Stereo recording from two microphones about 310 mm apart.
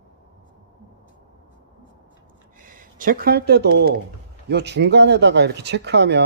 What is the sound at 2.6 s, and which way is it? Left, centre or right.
A man's voice, right.